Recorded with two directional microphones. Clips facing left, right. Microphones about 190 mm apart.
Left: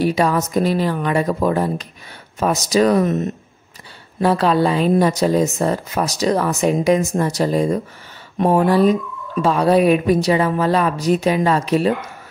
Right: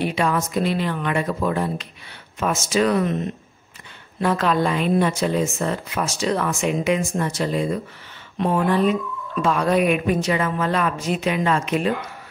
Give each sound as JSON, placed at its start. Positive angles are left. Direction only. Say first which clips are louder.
{"t": 0.0, "sound": "a woman's voice", "louder": "left 5 dB", "side_deg": 40}
{"t": 4.2, "sound": "a woman's voice", "louder": "left 4 dB", "side_deg": 30}